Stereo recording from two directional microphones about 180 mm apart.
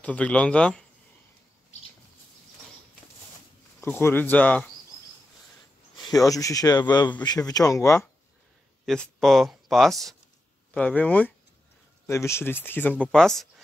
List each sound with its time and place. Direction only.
0.0 s speech: 5° left (ahead or behind)
3.8 s speech: 10° left (ahead or behind)
6.0 s speech: 20° left (ahead or behind)
8.8 s speech: 5° left (ahead or behind)